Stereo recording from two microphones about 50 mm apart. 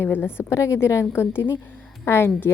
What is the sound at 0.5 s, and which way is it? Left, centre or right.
A woman's voice, left.